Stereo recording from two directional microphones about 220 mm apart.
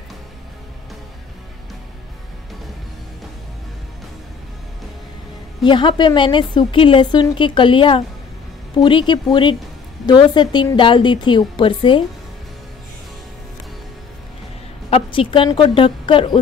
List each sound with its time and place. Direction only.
5.6 s a woman's voice: 20° left (ahead or behind)
14.9 s a woman's voice: 25° left (ahead or behind)